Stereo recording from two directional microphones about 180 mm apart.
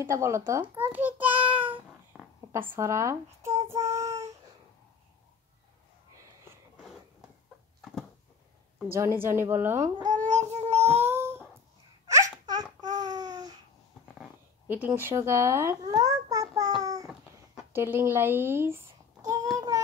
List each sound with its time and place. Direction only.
0.0 s a woman's voice: 15° right (ahead or behind)
1.6 s cat: 10° right (ahead or behind)
8.8 s a woman's voice: 15° right (ahead or behind)
10.0 s babbling: 45° right (ahead or behind)
11.1 s a sound: 15° right (ahead or behind)
12.1 s babbling: 20° right (ahead or behind)
14.0 s a sound: 5° right (ahead or behind); by 16.7 s 20° right (ahead or behind)
16.8 s babbling: 20° right (ahead or behind)
17.7 s a woman's voice: 15° right (ahead or behind)
19.2 s child singing: 20° right (ahead or behind)